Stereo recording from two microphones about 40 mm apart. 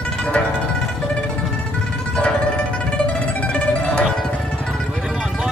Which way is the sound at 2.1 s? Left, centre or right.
Left.